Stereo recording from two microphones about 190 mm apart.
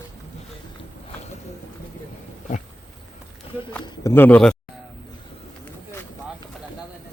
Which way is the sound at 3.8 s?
15° left (ahead or behind).